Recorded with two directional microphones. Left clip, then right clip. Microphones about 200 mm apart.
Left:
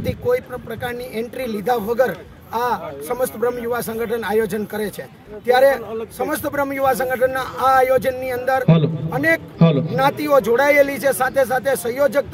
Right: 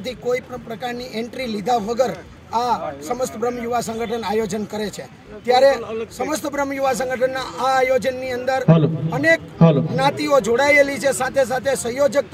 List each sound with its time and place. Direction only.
0.8 s a man's voice: centre (ahead or behind)
9.6 s a sound: 30° right (ahead or behind)
9.9 s a man's voice: 5° left (ahead or behind)